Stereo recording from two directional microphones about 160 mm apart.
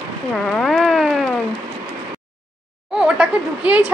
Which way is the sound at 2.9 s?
5° right (ahead or behind).